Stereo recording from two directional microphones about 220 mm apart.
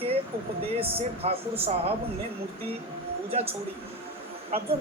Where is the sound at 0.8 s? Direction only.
25° right (ahead or behind).